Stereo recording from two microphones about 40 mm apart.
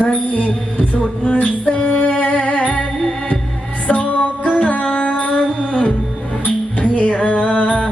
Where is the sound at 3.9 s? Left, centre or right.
Left.